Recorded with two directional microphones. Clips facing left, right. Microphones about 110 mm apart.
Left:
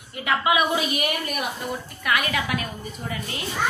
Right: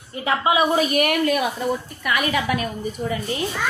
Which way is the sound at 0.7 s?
55° right (ahead or behind).